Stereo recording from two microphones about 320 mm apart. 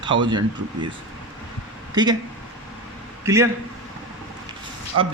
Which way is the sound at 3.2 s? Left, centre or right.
Centre.